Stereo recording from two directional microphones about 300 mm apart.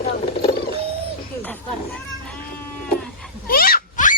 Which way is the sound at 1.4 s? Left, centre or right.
Centre.